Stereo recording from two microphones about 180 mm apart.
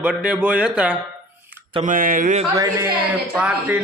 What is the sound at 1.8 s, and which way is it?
Speech, 50° right (ahead or behind).